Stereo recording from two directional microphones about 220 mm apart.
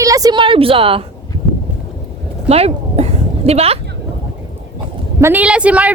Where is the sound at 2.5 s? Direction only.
30° right (ahead or behind).